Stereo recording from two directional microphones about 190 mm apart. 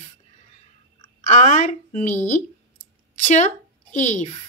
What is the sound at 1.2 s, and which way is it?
A woman's voice, 40° left (ahead or behind).